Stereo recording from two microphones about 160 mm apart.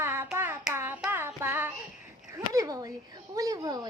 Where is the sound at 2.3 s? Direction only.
20° right (ahead or behind).